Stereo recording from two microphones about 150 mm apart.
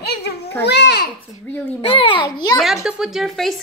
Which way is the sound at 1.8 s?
35° left (ahead or behind).